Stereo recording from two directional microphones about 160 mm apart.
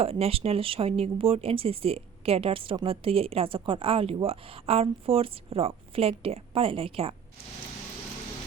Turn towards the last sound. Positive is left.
turn(degrees=-35)  # may be behind; listen again after turning